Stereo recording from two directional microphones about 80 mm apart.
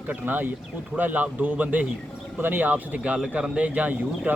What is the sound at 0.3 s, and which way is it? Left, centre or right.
Speech, right.